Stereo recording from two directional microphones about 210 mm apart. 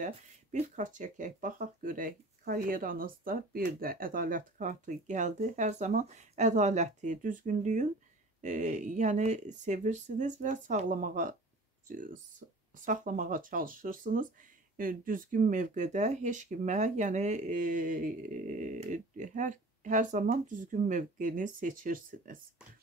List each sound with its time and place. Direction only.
0.0 s speech: 35° right (ahead or behind)